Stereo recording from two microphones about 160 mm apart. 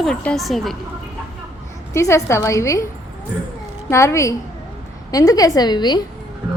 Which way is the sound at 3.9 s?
20° left (ahead or behind).